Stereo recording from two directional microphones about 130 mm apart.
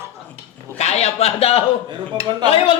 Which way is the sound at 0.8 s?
55° left (ahead or behind).